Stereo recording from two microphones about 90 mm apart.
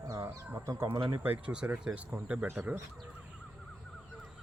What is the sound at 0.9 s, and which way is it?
Speech, 60° right (ahead or behind).